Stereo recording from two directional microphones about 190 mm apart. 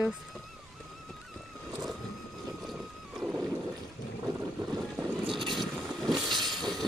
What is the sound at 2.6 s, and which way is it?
Boat, centre (ahead or behind).